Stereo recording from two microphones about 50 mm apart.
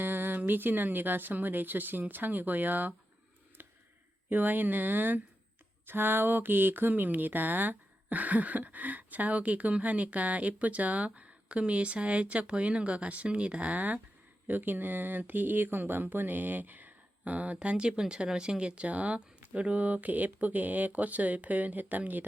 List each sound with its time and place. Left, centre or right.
0.0 s speech: right
3.6 s a sound: right
4.3 s speech: right